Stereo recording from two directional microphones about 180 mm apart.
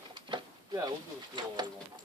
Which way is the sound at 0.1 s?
25° right (ahead or behind).